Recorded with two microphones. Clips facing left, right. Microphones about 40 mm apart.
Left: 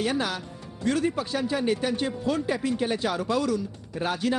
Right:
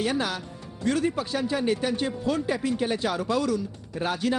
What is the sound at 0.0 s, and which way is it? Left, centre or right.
Speech, centre.